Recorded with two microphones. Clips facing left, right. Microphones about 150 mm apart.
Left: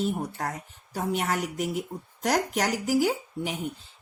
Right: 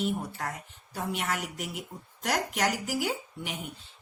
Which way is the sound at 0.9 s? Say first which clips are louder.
Left 5 dB; 40° left (ahead or behind).